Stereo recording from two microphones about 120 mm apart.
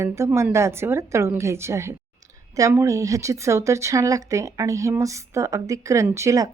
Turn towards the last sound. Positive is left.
turn(degrees=-25)  # may be behind; listen again after turning